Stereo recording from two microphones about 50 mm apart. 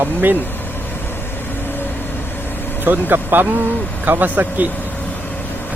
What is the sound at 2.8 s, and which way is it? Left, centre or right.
Speech, right.